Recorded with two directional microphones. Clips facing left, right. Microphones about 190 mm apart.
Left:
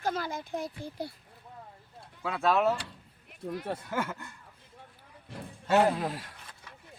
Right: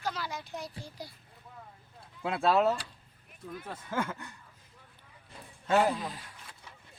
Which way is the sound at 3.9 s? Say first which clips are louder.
Right 2 dB; 10° left (ahead or behind).